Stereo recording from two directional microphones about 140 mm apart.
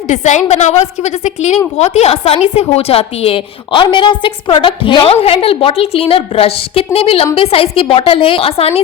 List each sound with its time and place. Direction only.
0.1 s a woman's voice: 55° left (ahead or behind)